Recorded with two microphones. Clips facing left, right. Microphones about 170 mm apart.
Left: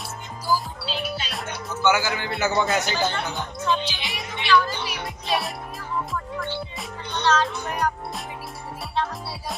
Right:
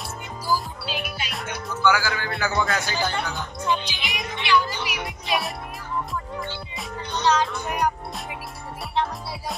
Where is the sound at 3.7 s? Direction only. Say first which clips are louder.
Left 1 dB; 15° right (ahead or behind).